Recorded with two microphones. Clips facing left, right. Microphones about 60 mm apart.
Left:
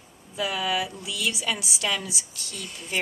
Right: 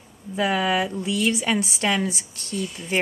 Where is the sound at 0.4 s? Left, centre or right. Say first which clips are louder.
Right 5 dB; right.